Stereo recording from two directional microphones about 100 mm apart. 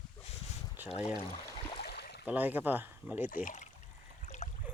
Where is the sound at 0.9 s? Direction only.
75° left (ahead or behind).